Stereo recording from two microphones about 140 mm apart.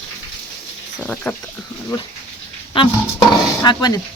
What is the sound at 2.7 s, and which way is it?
Speech, 35° left (ahead or behind).